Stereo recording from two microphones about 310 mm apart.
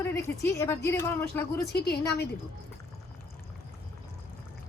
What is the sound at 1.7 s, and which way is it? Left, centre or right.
Speech, left.